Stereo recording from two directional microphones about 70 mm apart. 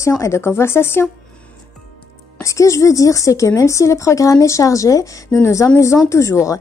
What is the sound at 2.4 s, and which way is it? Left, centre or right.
Speech, left.